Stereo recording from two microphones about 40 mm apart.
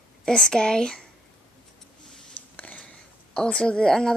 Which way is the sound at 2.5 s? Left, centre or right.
Left.